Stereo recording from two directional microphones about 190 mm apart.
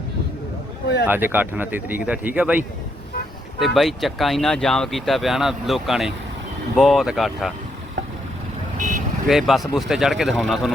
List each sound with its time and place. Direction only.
1.0 s speech: 10° right (ahead or behind)
8.8 s vehicle: 40° right (ahead or behind)
9.2 s speech: centre (ahead or behind)